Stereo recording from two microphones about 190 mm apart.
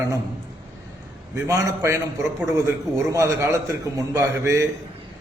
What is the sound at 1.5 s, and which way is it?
A man's voice, 15° right (ahead or behind).